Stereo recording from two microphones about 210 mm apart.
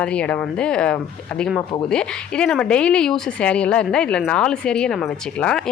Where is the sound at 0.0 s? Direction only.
5° left (ahead or behind).